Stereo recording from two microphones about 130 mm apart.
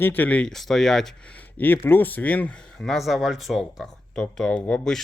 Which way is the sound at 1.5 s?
15° left (ahead or behind).